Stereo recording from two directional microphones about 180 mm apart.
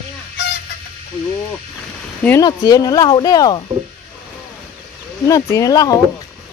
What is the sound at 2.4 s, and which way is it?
Speech, 20° left (ahead or behind).